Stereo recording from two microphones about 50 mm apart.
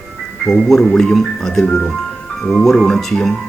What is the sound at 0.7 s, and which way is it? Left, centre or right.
Speech, centre.